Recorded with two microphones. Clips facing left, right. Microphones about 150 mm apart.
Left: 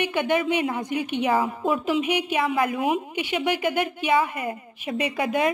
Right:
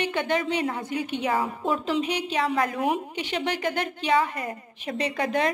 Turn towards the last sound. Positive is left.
turn(degrees=10)  # may be behind; listen again after turning